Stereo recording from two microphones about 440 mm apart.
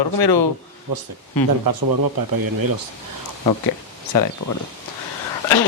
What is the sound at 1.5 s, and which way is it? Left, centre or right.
Speech, right.